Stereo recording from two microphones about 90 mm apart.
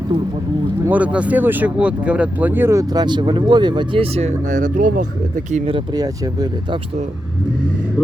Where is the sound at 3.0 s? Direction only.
60° right (ahead or behind); by 4.2 s 80° right.